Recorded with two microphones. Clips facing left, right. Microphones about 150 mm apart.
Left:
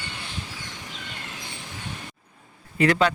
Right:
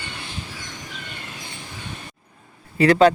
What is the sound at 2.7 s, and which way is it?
Speech, 35° right (ahead or behind).